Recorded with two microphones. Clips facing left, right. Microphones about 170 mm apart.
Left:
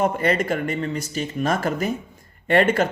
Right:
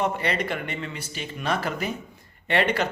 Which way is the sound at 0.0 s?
45° left (ahead or behind).